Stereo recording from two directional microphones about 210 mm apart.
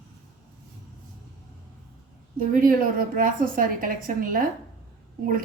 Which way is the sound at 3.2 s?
40° right (ahead or behind).